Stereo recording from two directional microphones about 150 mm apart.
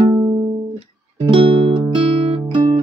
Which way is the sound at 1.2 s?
35° right (ahead or behind).